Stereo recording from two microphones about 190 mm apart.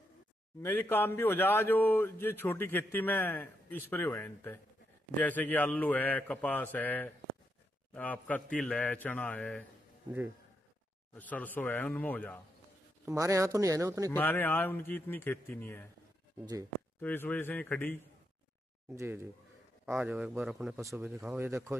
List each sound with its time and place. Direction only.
0.6 s speech: 10° left (ahead or behind)
11.1 s speech: 10° left (ahead or behind)
13.0 s speech: 15° right (ahead or behind)
14.1 s speech: 10° left (ahead or behind)
17.0 s speech: 10° left (ahead or behind)
18.9 s speech: 10° right (ahead or behind)